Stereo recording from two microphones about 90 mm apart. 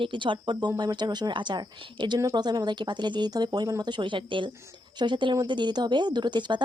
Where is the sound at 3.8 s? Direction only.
60° right (ahead or behind).